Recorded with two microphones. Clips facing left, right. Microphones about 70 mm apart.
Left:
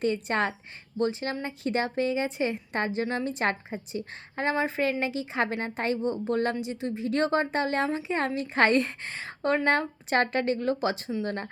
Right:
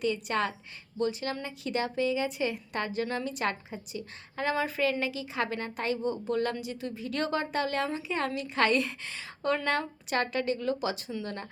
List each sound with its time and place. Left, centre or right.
0.0 s a woman's voice: left